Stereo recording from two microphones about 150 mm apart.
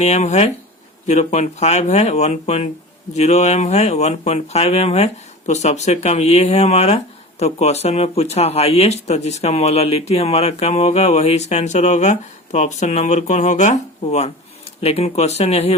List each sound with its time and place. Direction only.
0.0 s speech: 45° left (ahead or behind)